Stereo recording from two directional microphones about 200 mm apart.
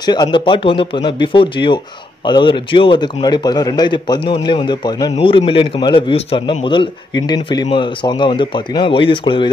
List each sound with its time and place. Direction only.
0.0 s a man's voice: 20° left (ahead or behind)